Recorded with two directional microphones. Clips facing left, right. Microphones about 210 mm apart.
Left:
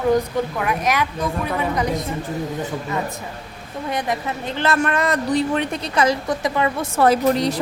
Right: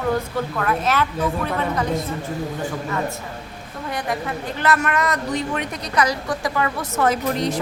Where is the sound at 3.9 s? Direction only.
20° left (ahead or behind).